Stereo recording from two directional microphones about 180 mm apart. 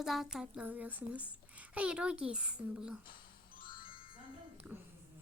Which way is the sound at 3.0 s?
50° left (ahead or behind).